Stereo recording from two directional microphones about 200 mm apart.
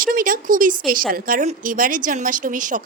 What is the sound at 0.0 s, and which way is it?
A woman's voice, 45° right (ahead or behind).